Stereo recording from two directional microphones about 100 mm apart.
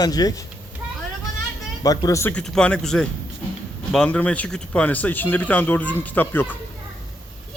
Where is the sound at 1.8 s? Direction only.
35° left (ahead or behind).